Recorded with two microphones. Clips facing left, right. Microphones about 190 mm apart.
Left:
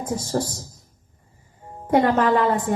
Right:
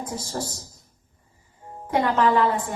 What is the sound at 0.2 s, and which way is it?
Speech, 50° left (ahead or behind).